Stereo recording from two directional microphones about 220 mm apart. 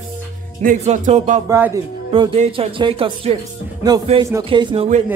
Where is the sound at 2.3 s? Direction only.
25° right (ahead or behind).